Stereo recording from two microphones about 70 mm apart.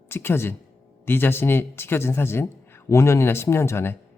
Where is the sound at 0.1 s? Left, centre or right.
Left.